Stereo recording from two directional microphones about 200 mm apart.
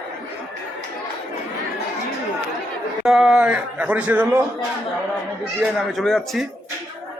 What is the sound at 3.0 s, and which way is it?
A man's voice, centre (ahead or behind).